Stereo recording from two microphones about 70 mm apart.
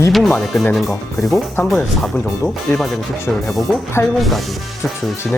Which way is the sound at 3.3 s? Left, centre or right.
Centre.